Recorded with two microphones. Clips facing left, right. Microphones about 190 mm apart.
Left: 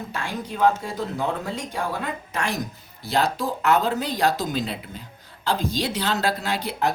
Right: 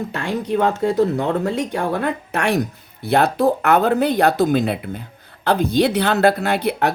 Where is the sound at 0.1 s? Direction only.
65° right (ahead or behind).